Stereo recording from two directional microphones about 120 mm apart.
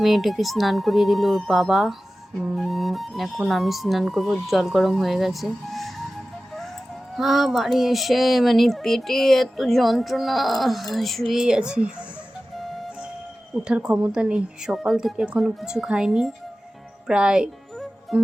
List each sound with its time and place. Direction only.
0.0 s speech: centre (ahead or behind)
7.2 s speech: centre (ahead or behind)
13.7 s speech: 10° right (ahead or behind)
17.1 s music: 5° right (ahead or behind)